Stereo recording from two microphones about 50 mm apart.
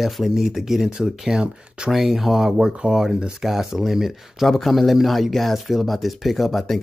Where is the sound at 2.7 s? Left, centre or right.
Right.